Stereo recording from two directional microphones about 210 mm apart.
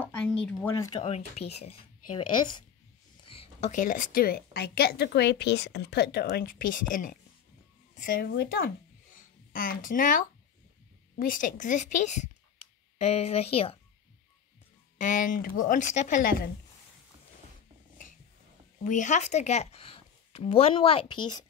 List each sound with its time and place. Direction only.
0.0 s a sound: 5° left (ahead or behind)
0.5 s speech: 5° left (ahead or behind)
1.0 s a woman's voice: 30° left (ahead or behind)
15.0 s a woman's voice: 40° left (ahead or behind)
18.9 s a woman's voice: 35° left (ahead or behind)